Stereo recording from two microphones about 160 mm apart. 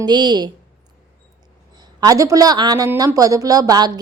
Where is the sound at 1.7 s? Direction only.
25° right (ahead or behind).